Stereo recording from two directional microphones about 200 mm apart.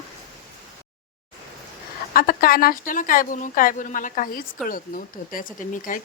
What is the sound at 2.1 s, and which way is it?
Speech, 45° left (ahead or behind).